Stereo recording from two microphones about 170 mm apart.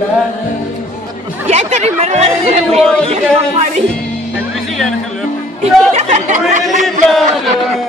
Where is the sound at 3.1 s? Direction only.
35° right (ahead or behind).